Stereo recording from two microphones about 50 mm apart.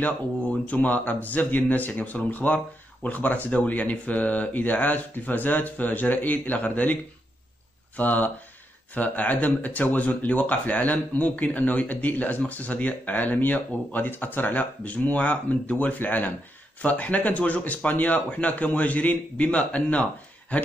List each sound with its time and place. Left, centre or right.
0.0 s speech: left
8.0 s speech: left